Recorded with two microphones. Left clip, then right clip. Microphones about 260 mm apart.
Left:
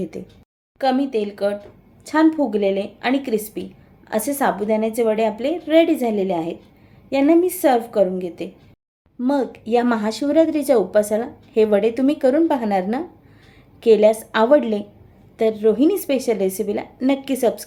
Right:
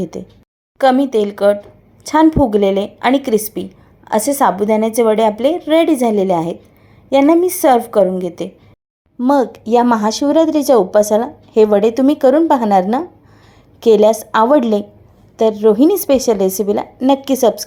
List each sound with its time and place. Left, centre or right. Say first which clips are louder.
0.0 s speech: right 5 dB; centre
0.8 s a woman's voice: right 8 dB; right